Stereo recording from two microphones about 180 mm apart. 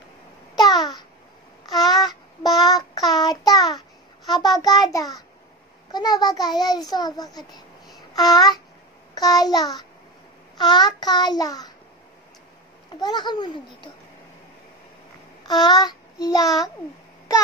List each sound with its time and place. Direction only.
0.6 s babbling: 20° left (ahead or behind)
1.7 s child singing: 20° left (ahead or behind)
4.6 s a child's voice: 20° left (ahead or behind)
12.9 s a child's voice: 25° left (ahead or behind)
15.4 s child singing: 20° left (ahead or behind)